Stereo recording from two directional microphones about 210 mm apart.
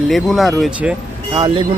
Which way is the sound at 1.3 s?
20° right (ahead or behind).